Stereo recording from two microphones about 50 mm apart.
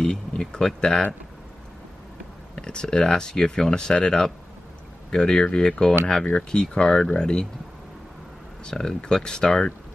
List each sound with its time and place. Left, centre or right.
0.0 s speech: centre
2.5 s speech: centre
8.6 s speech: centre